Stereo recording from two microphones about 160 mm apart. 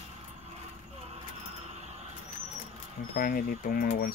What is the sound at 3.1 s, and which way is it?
Speech, 65° left (ahead or behind).